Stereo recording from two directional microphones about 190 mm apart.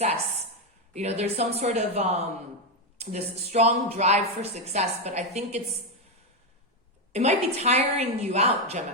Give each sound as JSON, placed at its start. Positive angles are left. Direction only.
{"t": 0.9, "sound": "a woman's voice", "side_deg": -35}
{"t": 7.1, "sound": "a woman's voice", "side_deg": -35}